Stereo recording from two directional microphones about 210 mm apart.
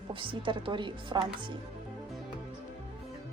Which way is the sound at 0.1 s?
25° right (ahead or behind).